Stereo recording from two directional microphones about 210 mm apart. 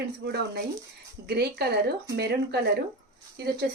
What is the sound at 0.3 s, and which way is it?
A woman's voice, 50° right (ahead or behind).